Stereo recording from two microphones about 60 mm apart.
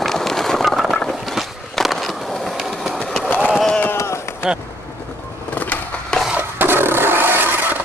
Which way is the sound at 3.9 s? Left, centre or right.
Left.